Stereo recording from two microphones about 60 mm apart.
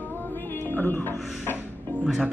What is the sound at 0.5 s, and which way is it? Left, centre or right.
Speech, left.